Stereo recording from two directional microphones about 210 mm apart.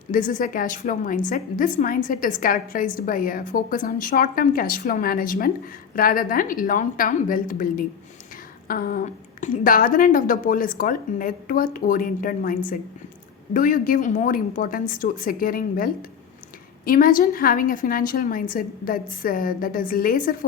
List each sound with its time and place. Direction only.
0.1 s a woman's voice: 40° left (ahead or behind)